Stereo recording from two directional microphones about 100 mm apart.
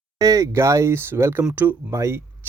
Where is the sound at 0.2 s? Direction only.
35° right (ahead or behind).